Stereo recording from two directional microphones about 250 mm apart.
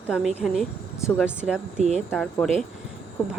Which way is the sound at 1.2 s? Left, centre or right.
Centre.